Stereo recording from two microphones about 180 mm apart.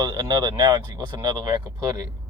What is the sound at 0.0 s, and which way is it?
Speech, 20° right (ahead or behind).